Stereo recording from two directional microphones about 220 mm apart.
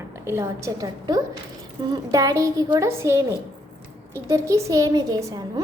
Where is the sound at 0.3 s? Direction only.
15° right (ahead or behind).